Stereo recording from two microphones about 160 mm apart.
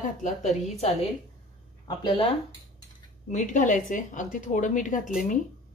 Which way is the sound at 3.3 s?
50° left (ahead or behind).